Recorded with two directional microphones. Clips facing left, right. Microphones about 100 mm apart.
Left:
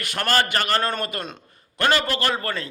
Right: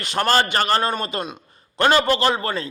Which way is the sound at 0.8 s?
15° right (ahead or behind).